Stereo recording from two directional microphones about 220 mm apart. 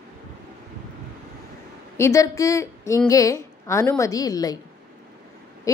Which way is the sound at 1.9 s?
15° left (ahead or behind).